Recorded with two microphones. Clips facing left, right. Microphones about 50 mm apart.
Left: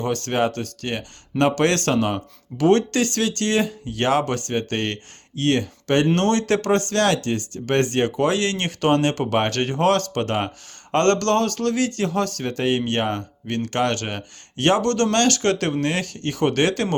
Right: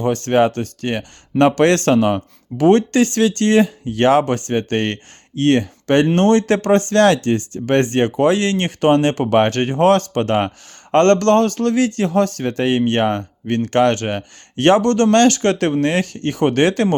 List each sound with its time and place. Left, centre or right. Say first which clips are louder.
0.0 s a man's voice: right 6 dB; right